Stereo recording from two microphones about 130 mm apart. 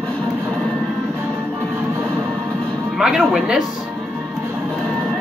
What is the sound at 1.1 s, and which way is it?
Music, 15° right (ahead or behind).